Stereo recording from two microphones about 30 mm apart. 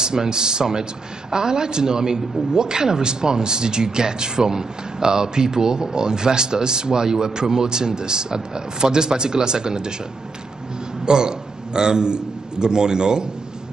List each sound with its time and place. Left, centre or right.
0.0 s a man's voice: right
11.1 s a man's voice: right